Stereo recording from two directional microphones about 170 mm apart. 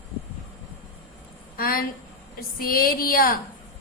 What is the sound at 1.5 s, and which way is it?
A woman's voice, 60° left (ahead or behind).